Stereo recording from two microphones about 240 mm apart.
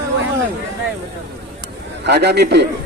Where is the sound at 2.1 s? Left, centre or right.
Right.